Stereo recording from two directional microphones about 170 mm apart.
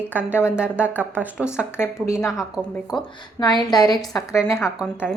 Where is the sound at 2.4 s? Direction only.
Centre (ahead or behind).